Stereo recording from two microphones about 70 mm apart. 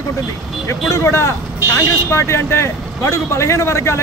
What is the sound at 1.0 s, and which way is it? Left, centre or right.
Speech, left.